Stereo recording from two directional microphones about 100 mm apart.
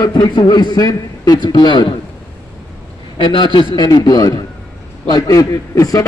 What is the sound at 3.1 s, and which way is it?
A man's voice, 50° left (ahead or behind).